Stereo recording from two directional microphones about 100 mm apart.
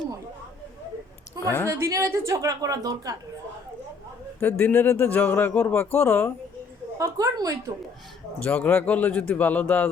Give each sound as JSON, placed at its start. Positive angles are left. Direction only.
{"t": 1.4, "sound": "a sound", "side_deg": 30}
{"t": 1.8, "sound": "a woman's voice", "side_deg": -30}
{"t": 4.4, "sound": "speech", "side_deg": 20}
{"t": 7.0, "sound": "a woman's voice", "side_deg": -35}
{"t": 8.4, "sound": "speech", "side_deg": 15}